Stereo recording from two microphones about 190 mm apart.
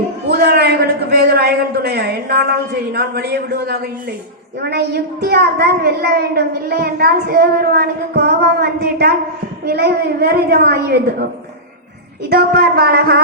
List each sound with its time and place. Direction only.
0.3 s a man's voice: 55° right (ahead or behind)
12.3 s a woman's voice: 55° right (ahead or behind)